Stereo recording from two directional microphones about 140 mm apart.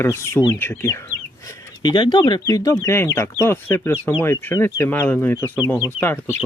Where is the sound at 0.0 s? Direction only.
15° left (ahead or behind).